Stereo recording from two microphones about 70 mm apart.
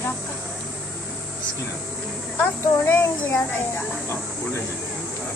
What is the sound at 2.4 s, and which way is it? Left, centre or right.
A child's voice, left.